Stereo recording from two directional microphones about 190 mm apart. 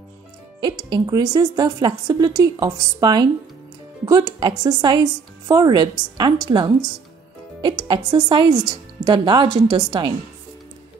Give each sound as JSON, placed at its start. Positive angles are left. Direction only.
{"t": 0.6, "sound": "a woman's voice", "side_deg": -25}